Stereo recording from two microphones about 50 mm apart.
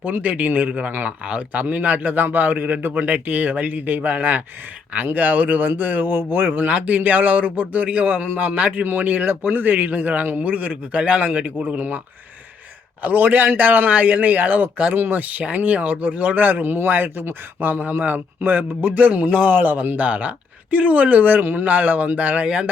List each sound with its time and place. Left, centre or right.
0.0 s a man's voice: right
6.7 s a man's voice: right
13.0 s a man's voice: right